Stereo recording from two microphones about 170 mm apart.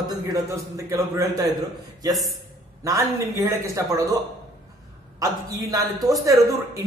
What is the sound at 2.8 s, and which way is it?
A man's voice, 20° right (ahead or behind).